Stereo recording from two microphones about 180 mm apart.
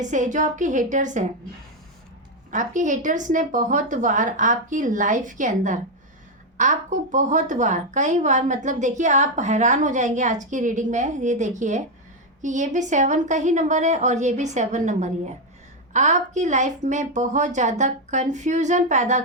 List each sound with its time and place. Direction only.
0.0 s speech: 45° right (ahead or behind)
2.5 s a woman's voice: 45° right (ahead or behind)